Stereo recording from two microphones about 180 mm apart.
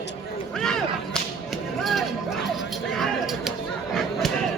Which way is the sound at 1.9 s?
Centre (ahead or behind).